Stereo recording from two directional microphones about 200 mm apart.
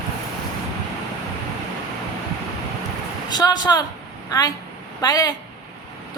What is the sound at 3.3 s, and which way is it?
A woman's voice, 20° left (ahead or behind).